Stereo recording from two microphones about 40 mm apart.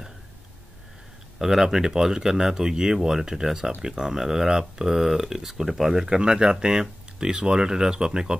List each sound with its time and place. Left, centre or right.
1.4 s speech: centre
6.0 s speech: centre